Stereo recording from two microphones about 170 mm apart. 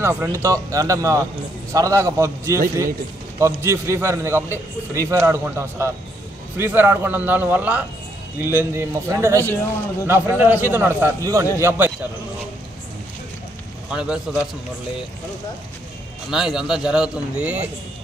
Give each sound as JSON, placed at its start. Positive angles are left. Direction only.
{"t": 0.0, "sound": "a man's voice", "side_deg": -15}
{"t": 13.8, "sound": "speech", "side_deg": -5}
{"t": 16.3, "sound": "speech", "side_deg": -5}